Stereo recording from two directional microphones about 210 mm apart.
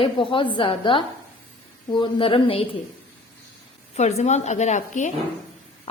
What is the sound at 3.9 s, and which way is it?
A woman's voice, 30° left (ahead or behind).